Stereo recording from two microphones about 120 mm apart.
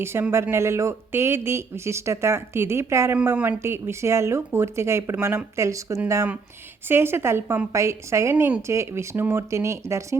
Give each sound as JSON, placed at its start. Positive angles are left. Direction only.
{"t": 0.0, "sound": "speech", "side_deg": -20}
{"t": 3.3, "sound": "a woman's voice", "side_deg": -10}
{"t": 3.6, "sound": "speech", "side_deg": -20}